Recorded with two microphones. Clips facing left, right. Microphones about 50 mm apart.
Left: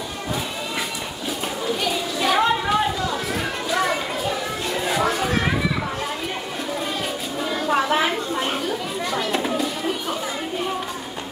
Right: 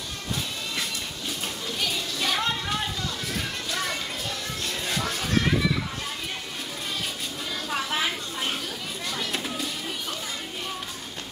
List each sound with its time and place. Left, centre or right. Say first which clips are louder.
1.7 s a sound: left 6 dB; centre
3.7 s children playing: left 10 dB; centre
7.6 s children playing: left 8 dB; centre